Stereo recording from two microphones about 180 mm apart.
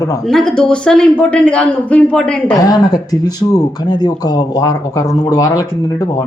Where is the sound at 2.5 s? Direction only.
20° left (ahead or behind).